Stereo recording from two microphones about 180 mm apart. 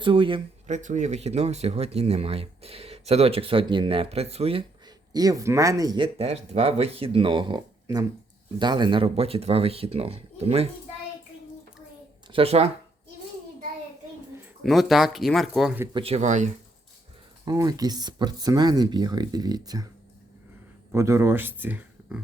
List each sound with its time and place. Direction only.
0.0 s speech: 30° right (ahead or behind)
0.7 s speech: 40° right (ahead or behind)
5.1 s speech: 20° right (ahead or behind)
6.1 s speech: 35° right (ahead or behind)
12.3 s speech: 35° right (ahead or behind)
14.6 s speech: centre (ahead or behind)
15.9 s speech: 30° right (ahead or behind)
17.4 s speech: 20° right (ahead or behind)
20.9 s speech: 15° right (ahead or behind)